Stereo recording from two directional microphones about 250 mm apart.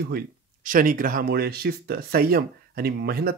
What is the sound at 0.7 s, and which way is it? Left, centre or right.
A man's voice, right.